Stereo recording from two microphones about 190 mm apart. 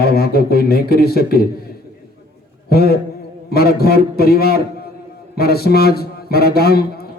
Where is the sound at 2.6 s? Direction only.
55° left (ahead or behind).